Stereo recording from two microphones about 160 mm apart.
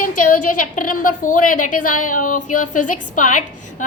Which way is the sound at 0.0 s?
55° left (ahead or behind).